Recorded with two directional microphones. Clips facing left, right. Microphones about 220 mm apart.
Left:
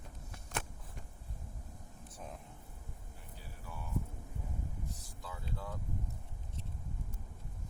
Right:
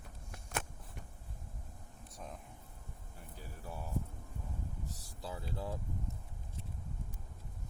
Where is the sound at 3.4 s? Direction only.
35° right (ahead or behind).